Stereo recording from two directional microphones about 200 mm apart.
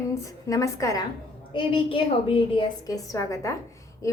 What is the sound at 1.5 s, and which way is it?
A woman's voice, 25° left (ahead or behind).